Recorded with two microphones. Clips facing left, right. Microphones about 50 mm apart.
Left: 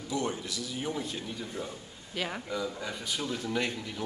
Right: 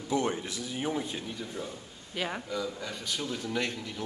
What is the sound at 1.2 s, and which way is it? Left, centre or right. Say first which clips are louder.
A man's voice: even; centre.